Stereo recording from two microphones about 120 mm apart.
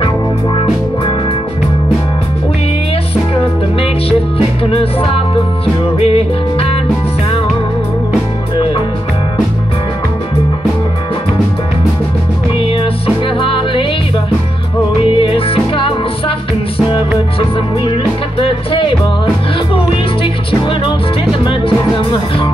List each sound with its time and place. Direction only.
5.9 s music: 60° left (ahead or behind)
12.5 s music: 50° left (ahead or behind)
15.1 s music: 50° left (ahead or behind)
18.4 s music: 50° left (ahead or behind)
21.5 s music: 45° left (ahead or behind)